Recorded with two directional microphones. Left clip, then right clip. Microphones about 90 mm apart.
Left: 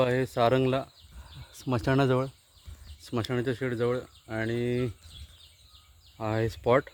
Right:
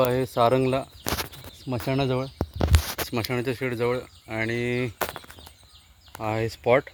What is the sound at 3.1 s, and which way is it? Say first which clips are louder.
Speech: even; 25° left (ahead or behind).